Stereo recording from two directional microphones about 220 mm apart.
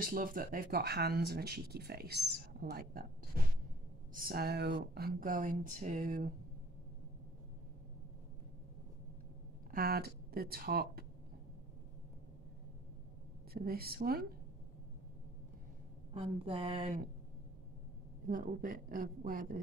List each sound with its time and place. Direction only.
0.0 s speech: 40° right (ahead or behind)
4.1 s speech: 40° right (ahead or behind)
9.7 s speech: 45° right (ahead or behind)
13.5 s speech: 45° right (ahead or behind)
16.1 s a woman's voice: 25° right (ahead or behind)
18.3 s speech: 40° right (ahead or behind)